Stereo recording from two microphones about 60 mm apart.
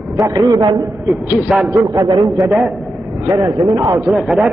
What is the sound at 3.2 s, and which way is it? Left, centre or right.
Speech, right.